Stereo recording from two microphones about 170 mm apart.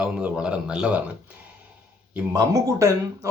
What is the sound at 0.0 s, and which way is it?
Speech, 5° right (ahead or behind).